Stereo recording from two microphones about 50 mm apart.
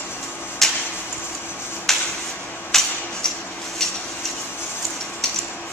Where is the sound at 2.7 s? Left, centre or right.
Centre.